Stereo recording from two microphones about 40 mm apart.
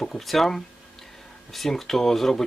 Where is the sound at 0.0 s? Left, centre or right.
Centre.